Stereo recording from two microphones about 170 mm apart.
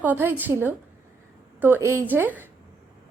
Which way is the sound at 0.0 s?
10° right (ahead or behind).